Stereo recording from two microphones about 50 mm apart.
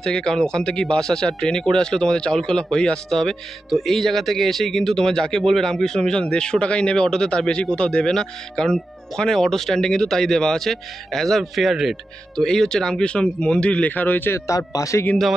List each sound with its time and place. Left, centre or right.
0.0 s speech: centre
12.4 s speech: centre; by 14.3 s left